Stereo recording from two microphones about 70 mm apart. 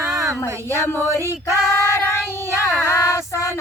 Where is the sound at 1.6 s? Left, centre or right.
Left.